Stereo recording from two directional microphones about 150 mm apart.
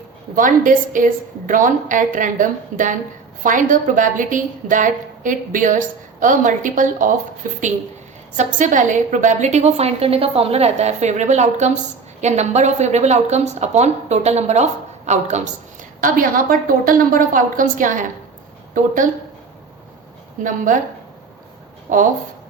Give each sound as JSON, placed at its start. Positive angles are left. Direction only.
{"t": 0.3, "sound": "a woman's voice", "side_deg": -60}
{"t": 8.4, "sound": "speech", "side_deg": -55}
{"t": 20.4, "sound": "a woman's voice", "side_deg": -60}
{"t": 21.9, "sound": "a woman's voice", "side_deg": -60}